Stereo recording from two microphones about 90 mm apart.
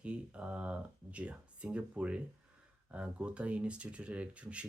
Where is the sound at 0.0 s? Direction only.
15° right (ahead or behind).